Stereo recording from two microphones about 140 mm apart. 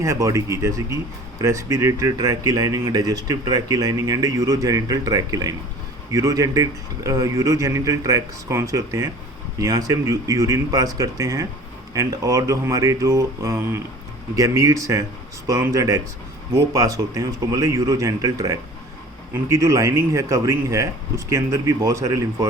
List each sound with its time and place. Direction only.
0.0 s speech: 20° right (ahead or behind)